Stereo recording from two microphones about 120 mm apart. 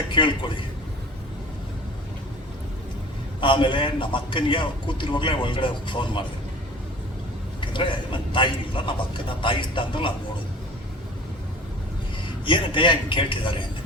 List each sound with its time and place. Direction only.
0.1 s speech: 40° left (ahead or behind)
3.4 s a man's voice: 45° left (ahead or behind)
7.6 s a man's voice: 45° left (ahead or behind)
12.5 s a man's voice: 45° left (ahead or behind)